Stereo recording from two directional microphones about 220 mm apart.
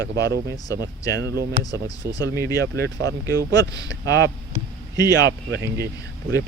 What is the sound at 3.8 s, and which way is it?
Speech, 50° right (ahead or behind).